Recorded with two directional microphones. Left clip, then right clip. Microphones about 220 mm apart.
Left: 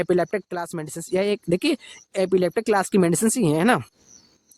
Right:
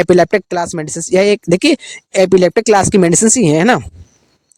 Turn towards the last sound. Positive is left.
turn(degrees=-35)  # may be behind; listen again after turning